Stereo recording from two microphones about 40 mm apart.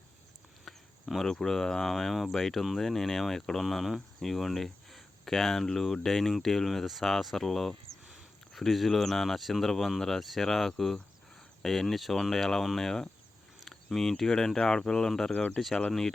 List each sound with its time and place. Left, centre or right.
0.6 s a sound: centre
1.2 s speech: centre
15.3 s speech: left
15.9 s speech: centre